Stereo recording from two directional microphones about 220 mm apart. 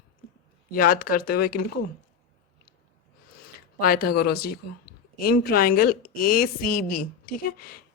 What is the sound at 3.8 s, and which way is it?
A woman's voice, 40° left (ahead or behind).